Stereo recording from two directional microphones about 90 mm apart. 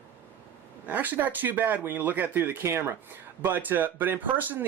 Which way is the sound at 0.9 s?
20° right (ahead or behind).